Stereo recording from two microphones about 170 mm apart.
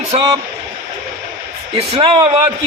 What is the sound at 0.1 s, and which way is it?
Speech, 35° right (ahead or behind).